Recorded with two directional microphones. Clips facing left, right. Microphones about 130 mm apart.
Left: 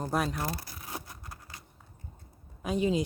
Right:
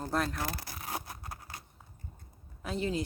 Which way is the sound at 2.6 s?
15° left (ahead or behind).